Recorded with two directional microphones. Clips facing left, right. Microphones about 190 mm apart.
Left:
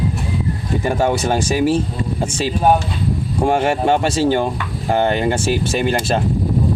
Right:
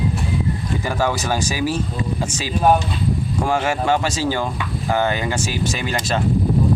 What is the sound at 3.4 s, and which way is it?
Speech, 30° left (ahead or behind).